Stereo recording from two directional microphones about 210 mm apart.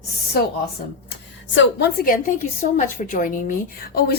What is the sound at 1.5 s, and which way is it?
Speech, 60° left (ahead or behind).